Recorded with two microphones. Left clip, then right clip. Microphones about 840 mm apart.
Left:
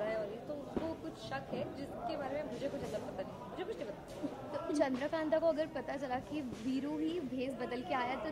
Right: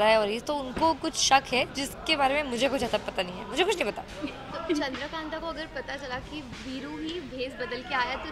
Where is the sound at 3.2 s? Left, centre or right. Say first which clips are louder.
Right 15 dB; right.